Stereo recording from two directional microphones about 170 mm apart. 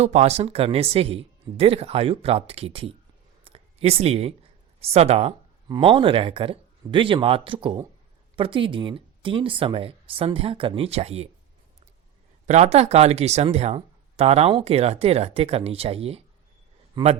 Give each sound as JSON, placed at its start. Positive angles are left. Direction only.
{"t": 0.0, "sound": "speech", "side_deg": -40}
{"t": 3.4, "sound": "a sound", "side_deg": -35}
{"t": 4.8, "sound": "speech", "side_deg": -35}
{"t": 12.5, "sound": "a man's voice", "side_deg": -40}